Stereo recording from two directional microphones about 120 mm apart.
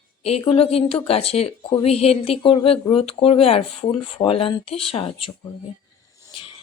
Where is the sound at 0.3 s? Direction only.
55° left (ahead or behind).